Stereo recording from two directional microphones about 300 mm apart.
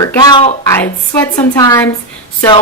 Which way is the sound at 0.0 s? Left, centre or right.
Centre.